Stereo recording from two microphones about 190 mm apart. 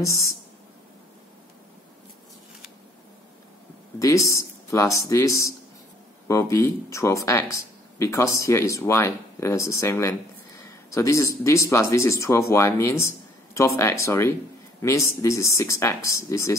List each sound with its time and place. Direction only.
4.0 s speech: 15° left (ahead or behind)